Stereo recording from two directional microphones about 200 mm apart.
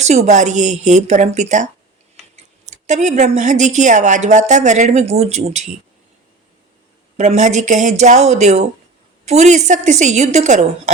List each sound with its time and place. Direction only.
0.0 s speech: 35° right (ahead or behind)
7.2 s speech: 35° right (ahead or behind)